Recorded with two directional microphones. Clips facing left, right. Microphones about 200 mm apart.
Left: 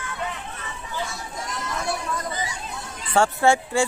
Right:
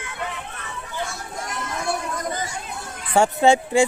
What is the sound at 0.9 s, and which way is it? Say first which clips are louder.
Chatter: right 1 dB; 50° right (ahead or behind).